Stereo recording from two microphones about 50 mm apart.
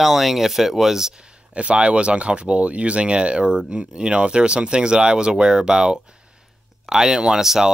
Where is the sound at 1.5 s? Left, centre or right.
Right.